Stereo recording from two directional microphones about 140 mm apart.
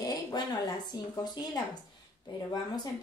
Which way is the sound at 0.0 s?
25° left (ahead or behind).